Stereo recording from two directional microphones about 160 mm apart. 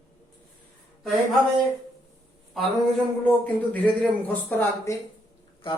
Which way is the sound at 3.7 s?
10° left (ahead or behind).